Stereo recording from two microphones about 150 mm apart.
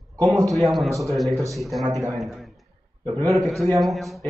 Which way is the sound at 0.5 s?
Centre (ahead or behind).